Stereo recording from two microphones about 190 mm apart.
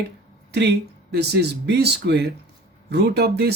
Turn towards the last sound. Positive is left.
turn(degrees=-60)  # may be behind; listen again after turning